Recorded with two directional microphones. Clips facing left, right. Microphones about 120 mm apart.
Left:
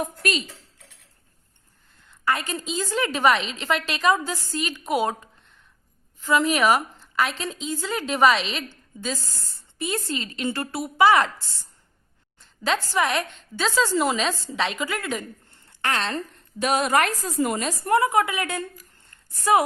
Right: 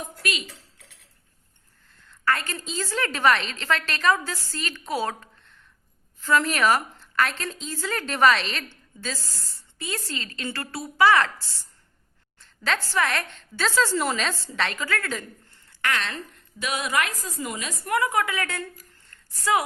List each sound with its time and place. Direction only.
0.0 s speech: 45° left (ahead or behind)
2.2 s a woman's voice: 15° left (ahead or behind)
9.7 s speech: 20° left (ahead or behind)
12.6 s a woman's voice: 15° left (ahead or behind)
15.4 s a woman's voice: 25° left (ahead or behind)
17.9 s speech: 25° left (ahead or behind)
19.0 s a sound: 25° left (ahead or behind)